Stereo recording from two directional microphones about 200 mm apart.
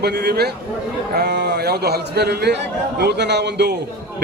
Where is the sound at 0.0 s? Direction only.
55° right (ahead or behind).